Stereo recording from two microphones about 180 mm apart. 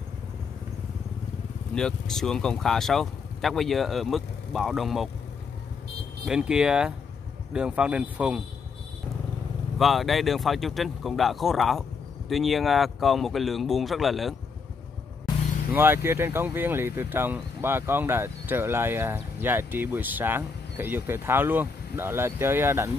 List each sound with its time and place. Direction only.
1.8 s speech: 5° left (ahead or behind)
6.2 s speech: 5° right (ahead or behind)
9.8 s speech: centre (ahead or behind)
15.7 s speech: 10° right (ahead or behind)